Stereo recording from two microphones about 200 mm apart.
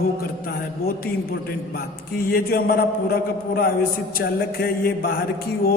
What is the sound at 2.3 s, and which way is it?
Mantra, 50° left (ahead or behind).